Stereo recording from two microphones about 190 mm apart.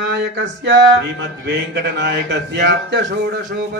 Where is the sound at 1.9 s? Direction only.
65° right (ahead or behind).